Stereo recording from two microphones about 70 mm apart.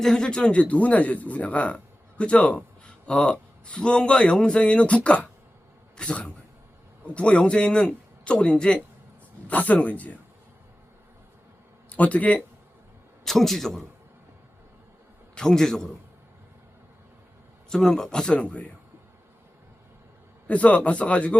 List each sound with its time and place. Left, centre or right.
0.0 s a man's voice: centre
11.9 s speech: left
13.2 s a man's voice: centre
15.4 s a man's voice: centre
17.7 s a man's voice: centre
20.5 s speech: centre